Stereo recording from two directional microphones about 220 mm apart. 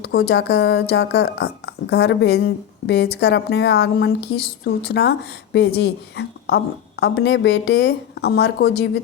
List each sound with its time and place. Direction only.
0.0 s speech: 50° left (ahead or behind)